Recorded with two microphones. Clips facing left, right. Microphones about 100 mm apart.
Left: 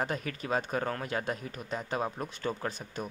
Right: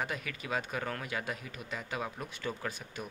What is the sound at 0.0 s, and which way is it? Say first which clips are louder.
Speech: left 4 dB; 40° left (ahead or behind).